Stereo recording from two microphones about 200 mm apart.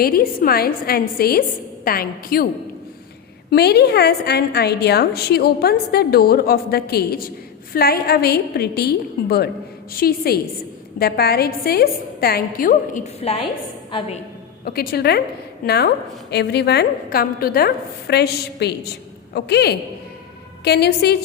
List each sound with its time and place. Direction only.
0.0 s a woman's voice: 50° left (ahead or behind)
3.5 s a woman's voice: 55° left (ahead or behind)
13.1 s a woman's voice: 30° left (ahead or behind)
14.6 s a woman's voice: 50° left (ahead or behind)